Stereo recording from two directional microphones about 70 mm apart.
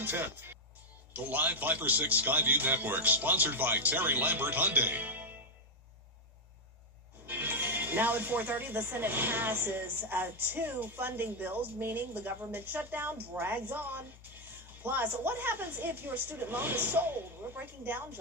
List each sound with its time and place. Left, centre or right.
0.0 s speech: right
7.3 s speech: right